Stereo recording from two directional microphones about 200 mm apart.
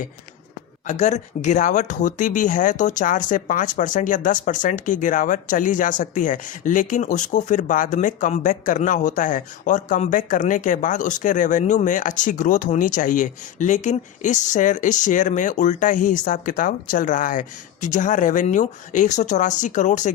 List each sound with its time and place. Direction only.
0.9 s speech: 35° left (ahead or behind)